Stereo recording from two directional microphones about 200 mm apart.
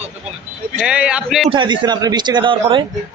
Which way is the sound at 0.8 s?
5° right (ahead or behind).